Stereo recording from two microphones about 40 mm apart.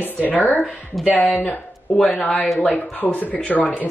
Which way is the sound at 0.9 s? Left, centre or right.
Centre.